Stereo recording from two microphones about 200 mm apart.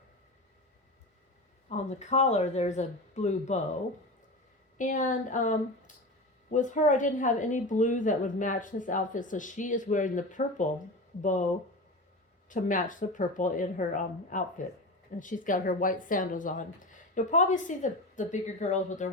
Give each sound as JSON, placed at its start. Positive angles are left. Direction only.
{"t": 1.7, "sound": "speech", "side_deg": 35}
{"t": 4.8, "sound": "speech", "side_deg": 40}
{"t": 12.5, "sound": "speech", "side_deg": 40}